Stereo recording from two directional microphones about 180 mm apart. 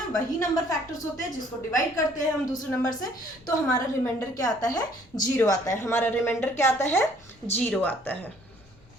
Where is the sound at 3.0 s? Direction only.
20° left (ahead or behind).